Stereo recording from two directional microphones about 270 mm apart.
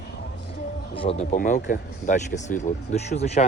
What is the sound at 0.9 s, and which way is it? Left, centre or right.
Speech, centre.